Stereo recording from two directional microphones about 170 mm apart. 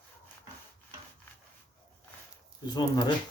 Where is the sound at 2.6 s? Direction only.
25° left (ahead or behind).